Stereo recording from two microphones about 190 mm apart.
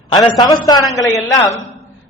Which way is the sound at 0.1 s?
20° left (ahead or behind).